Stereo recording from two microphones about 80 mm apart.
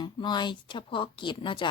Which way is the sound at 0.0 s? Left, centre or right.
Left.